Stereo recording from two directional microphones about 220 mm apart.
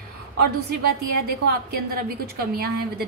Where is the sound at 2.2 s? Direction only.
45° right (ahead or behind).